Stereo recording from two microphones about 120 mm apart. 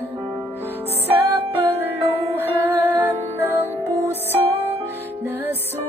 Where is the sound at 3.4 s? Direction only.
20° right (ahead or behind).